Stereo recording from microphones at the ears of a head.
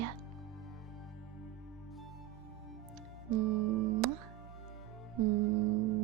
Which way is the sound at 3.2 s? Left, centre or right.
Right.